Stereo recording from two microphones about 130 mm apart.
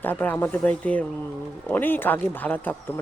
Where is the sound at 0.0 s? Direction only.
15° left (ahead or behind).